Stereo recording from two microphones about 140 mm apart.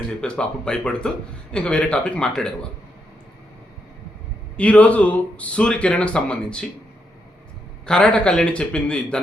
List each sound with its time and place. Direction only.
0.2 s speech: 5° left (ahead or behind)
4.5 s speech: 10° left (ahead or behind)
7.9 s speech: 5° left (ahead or behind)